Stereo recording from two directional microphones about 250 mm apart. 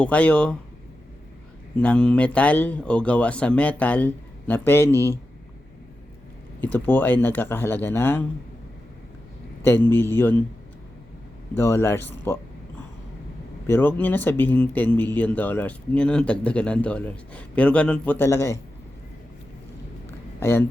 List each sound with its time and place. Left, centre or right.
0.0 s speech: centre
1.8 s speech: centre
6.6 s speech: centre
9.6 s speech: centre
11.5 s speech: centre
13.7 s speech: centre
20.4 s speech: centre